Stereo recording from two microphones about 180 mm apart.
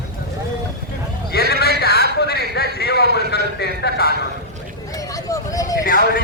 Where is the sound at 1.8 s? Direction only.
60° left (ahead or behind).